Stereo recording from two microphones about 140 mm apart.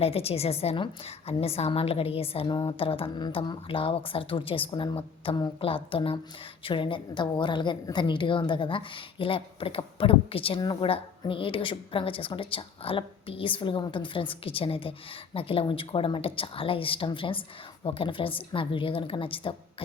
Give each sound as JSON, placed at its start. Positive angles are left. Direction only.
{"t": 0.0, "sound": "a woman's voice", "side_deg": 45}